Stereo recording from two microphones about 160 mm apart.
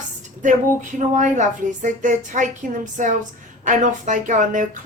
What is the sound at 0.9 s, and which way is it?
A woman's voice, 50° right (ahead or behind).